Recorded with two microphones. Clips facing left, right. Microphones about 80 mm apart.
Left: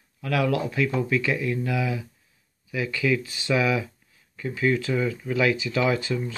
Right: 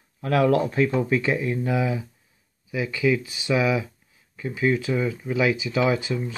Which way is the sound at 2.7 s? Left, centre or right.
Centre.